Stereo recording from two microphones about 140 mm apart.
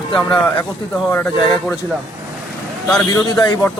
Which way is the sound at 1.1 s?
10° left (ahead or behind).